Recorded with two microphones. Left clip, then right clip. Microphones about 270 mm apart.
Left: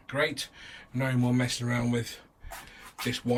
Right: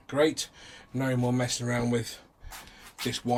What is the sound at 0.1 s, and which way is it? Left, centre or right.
Speech, centre.